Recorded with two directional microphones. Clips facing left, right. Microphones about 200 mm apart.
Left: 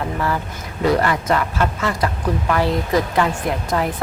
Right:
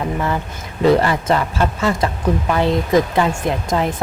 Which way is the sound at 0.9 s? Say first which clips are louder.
Right 3 dB; 25° right (ahead or behind).